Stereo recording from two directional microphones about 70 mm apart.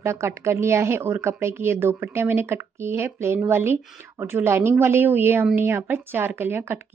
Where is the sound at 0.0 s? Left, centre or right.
Right.